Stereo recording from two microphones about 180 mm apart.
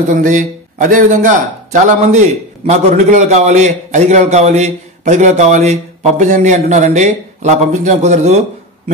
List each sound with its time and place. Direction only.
0.1 s a man's voice: 45° right (ahead or behind)